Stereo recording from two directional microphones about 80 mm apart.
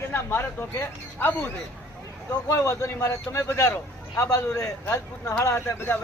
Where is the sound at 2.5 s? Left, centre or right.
Left.